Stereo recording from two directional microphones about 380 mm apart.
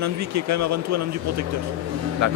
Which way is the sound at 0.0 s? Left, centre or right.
Right.